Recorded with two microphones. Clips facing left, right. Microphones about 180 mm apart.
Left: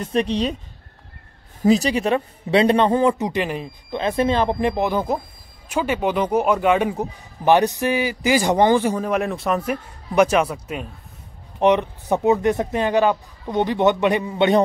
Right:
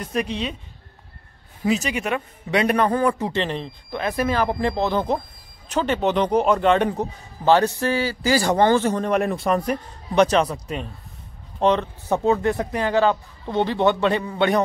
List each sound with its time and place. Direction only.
0.0 s speech: 30° left (ahead or behind)
1.6 s a man's voice: 35° left (ahead or behind); by 3.7 s 10° left (ahead or behind)
3.9 s a man's voice: 25° left (ahead or behind)